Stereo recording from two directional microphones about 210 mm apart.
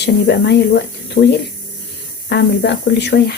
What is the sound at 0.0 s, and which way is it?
Speech, 55° left (ahead or behind).